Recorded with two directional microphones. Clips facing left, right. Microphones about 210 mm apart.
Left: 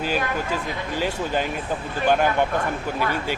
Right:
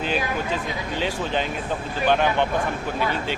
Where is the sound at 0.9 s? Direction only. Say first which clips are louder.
Left 1 dB; 5° left (ahead or behind).